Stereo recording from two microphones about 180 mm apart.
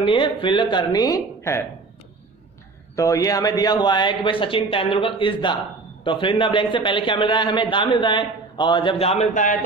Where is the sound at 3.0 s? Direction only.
20° left (ahead or behind).